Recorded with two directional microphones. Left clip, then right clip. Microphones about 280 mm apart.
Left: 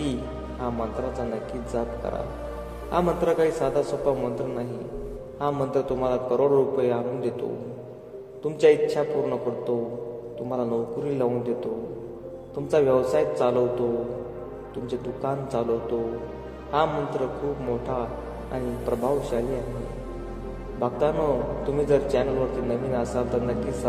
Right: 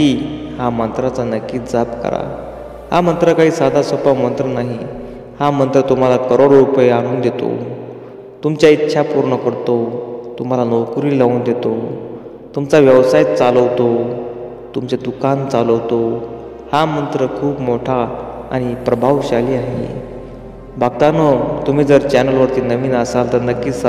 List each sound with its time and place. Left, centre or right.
0.0 s a man's voice: right
14.9 s a man's voice: right
20.8 s a man's voice: right